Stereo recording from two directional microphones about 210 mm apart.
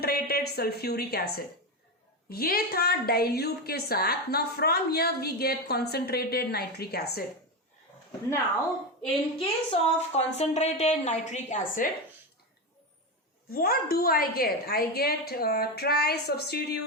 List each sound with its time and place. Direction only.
0.0 s a woman's voice: 50° left (ahead or behind)
2.3 s a woman's voice: 45° left (ahead or behind)
9.4 s a woman's voice: 25° left (ahead or behind)
13.5 s a woman's voice: 45° left (ahead or behind)